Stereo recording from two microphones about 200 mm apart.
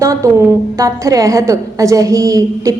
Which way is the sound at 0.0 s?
15° right (ahead or behind).